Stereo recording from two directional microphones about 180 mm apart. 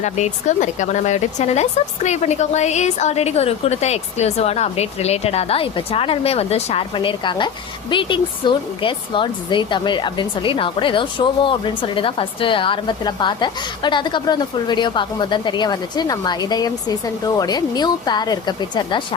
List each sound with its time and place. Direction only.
0.0 s a woman's voice: 40° left (ahead or behind); by 19.0 s 25° left (ahead or behind)